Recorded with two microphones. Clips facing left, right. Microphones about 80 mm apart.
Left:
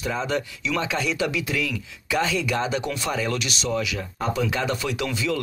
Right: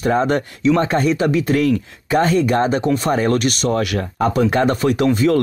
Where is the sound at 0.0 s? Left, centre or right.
Right.